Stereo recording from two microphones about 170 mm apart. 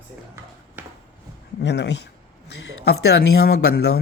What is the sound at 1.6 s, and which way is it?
Speech, 90° left.